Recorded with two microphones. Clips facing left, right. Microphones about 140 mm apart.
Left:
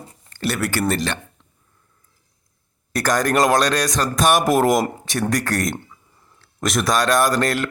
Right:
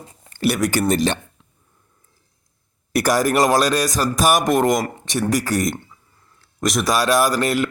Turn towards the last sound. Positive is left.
turn(degrees=0)  # may be behind; listen again after turning